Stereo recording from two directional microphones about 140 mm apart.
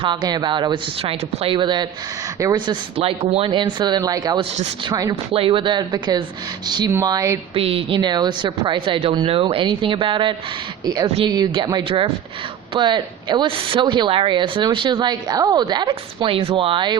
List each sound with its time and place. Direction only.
0.0 s a woman's voice: 30° right (ahead or behind)
3.0 s a woman's voice: 45° right (ahead or behind); by 5.1 s 30° right (ahead or behind)
5.3 s a woman's voice: 40° right (ahead or behind)
7.5 s a woman's voice: 45° right (ahead or behind)